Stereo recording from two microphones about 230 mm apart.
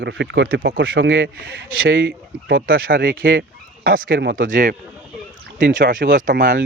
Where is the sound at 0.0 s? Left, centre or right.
Right.